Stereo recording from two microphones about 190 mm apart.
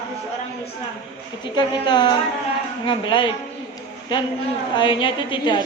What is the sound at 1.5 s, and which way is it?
A woman's voice, 25° left (ahead or behind).